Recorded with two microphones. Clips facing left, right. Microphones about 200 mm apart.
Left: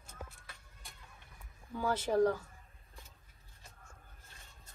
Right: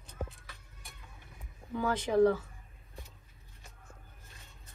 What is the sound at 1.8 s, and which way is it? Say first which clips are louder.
Speech: right 3 dB; 10° left (ahead or behind).